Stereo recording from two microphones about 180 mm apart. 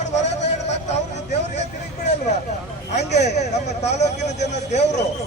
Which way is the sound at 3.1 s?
40° left (ahead or behind).